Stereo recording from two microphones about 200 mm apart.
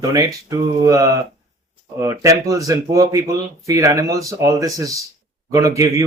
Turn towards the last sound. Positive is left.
turn(degrees=-15)  # may be behind; listen again after turning